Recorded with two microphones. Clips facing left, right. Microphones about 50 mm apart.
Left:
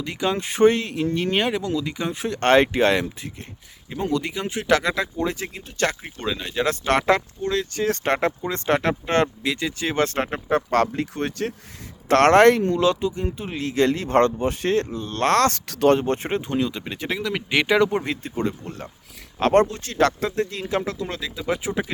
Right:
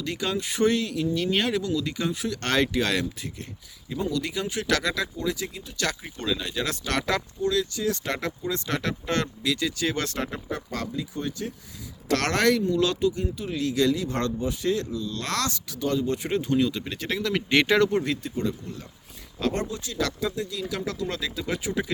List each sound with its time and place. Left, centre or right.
0.0 s speech: left
0.3 s speech: left
5.1 s speech: left
12.0 s speech: left